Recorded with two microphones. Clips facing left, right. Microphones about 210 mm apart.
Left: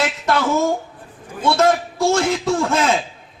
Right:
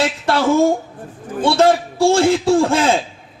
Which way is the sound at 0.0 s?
30° right (ahead or behind).